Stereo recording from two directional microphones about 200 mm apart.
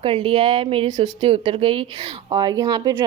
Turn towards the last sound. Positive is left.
turn(degrees=-20)  # may be behind; listen again after turning